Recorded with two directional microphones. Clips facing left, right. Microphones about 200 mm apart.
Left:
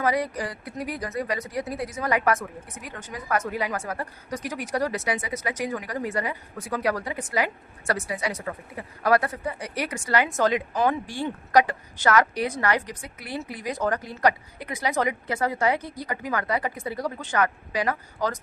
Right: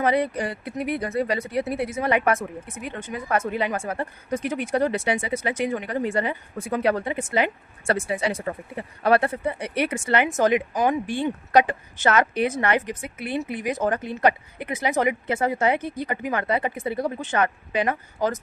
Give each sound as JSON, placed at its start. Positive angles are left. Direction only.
{"t": 0.0, "sound": "a woman's voice", "side_deg": -25}